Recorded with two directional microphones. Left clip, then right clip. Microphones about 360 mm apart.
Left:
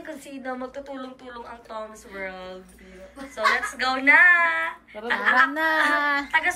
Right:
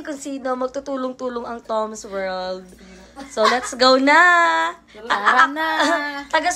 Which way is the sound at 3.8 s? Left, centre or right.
Centre.